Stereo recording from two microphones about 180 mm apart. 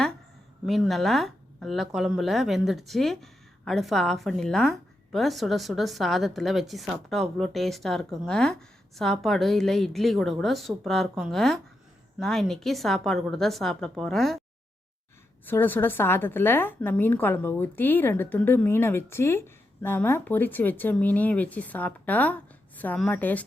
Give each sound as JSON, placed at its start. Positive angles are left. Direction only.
{"t": 0.6, "sound": "speech", "side_deg": 0}
{"t": 15.4, "sound": "a woman's voice", "side_deg": 10}